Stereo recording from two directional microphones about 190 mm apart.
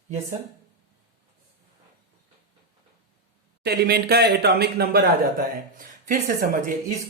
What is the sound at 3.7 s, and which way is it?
Speech, 55° right (ahead or behind).